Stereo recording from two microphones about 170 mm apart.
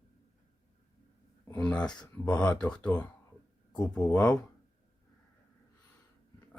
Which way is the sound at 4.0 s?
20° left (ahead or behind).